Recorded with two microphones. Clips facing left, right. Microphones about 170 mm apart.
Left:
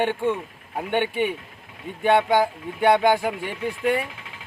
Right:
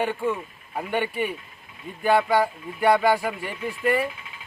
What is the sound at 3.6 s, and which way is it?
Speech, 65° left (ahead or behind).